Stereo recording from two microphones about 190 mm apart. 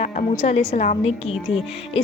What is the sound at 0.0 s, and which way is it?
Speech, 35° left (ahead or behind).